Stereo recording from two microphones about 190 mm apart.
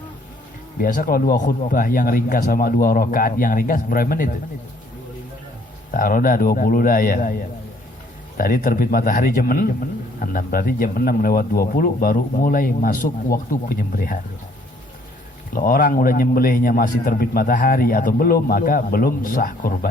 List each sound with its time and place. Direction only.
0.8 s a man's voice: 45° left (ahead or behind)
5.9 s a man's voice: 45° left (ahead or behind)
8.4 s a man's voice: 45° left (ahead or behind)
15.5 s a man's voice: 50° left (ahead or behind)